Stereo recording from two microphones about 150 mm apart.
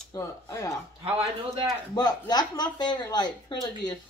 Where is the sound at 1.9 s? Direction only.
25° left (ahead or behind).